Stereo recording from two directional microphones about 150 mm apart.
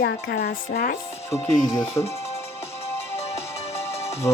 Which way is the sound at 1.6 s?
20° left (ahead or behind).